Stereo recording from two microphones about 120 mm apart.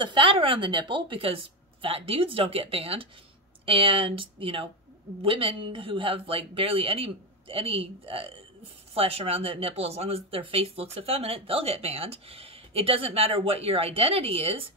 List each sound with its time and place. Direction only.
0.0 s speech: 45° right (ahead or behind)